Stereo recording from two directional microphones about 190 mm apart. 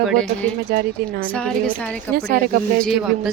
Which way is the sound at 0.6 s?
50° right (ahead or behind).